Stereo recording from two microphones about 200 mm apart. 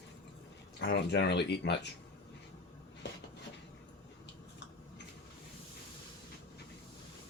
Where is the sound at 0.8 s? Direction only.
55° left (ahead or behind).